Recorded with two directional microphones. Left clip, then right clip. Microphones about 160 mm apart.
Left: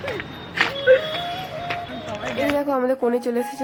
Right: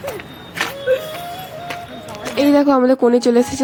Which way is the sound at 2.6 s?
40° right (ahead or behind).